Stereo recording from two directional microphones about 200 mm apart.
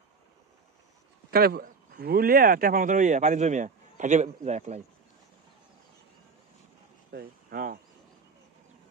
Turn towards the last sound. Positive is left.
turn(degrees=-45)  # may be behind; listen again after turning